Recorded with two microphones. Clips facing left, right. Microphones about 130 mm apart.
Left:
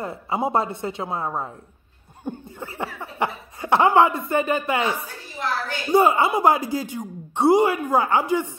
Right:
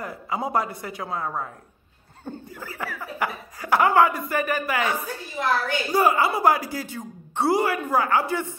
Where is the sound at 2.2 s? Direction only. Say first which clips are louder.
Left 4 dB; 15° left (ahead or behind).